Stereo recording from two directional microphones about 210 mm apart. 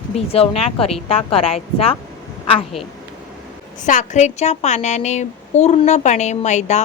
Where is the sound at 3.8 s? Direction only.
35° left (ahead or behind).